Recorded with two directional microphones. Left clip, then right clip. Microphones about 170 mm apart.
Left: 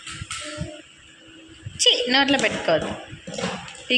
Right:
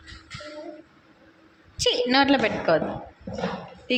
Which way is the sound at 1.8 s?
15° right (ahead or behind).